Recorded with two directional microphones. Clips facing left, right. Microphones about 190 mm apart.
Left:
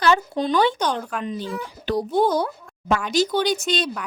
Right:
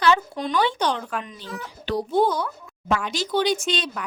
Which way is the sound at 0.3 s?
25° left (ahead or behind).